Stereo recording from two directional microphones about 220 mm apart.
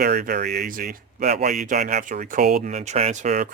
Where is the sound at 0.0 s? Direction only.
40° right (ahead or behind).